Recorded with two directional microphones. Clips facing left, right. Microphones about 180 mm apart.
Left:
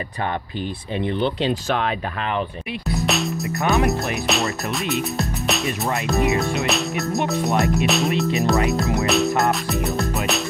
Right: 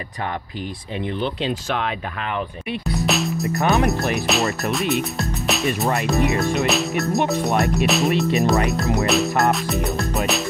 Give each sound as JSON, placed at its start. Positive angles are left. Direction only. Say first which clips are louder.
{"t": 0.9, "sound": "speech", "louder": "left 3 dB", "side_deg": 30}
{"t": 3.1, "sound": "music", "louder": "right 3 dB", "side_deg": 0}